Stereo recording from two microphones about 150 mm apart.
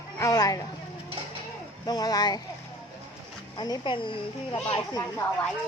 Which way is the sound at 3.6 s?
30° left (ahead or behind).